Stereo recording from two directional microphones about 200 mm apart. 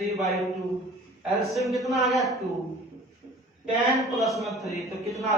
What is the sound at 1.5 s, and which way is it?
Speech, centre (ahead or behind).